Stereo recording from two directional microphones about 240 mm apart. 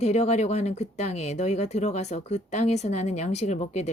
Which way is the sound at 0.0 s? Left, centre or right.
Left.